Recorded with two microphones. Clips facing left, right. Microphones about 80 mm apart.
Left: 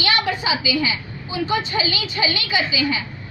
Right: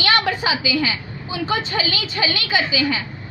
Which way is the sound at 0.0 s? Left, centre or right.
Right.